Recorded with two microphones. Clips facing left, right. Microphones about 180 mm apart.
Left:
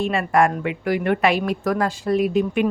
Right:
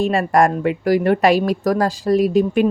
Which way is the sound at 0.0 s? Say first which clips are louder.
Right 3 dB; 40° right (ahead or behind).